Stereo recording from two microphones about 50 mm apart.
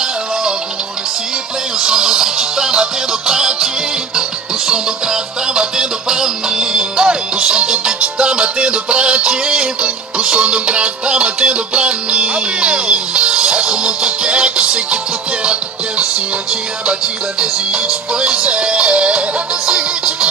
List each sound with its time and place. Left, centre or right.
0.0 s music: centre
1.8 s music: centre
17.4 s music: centre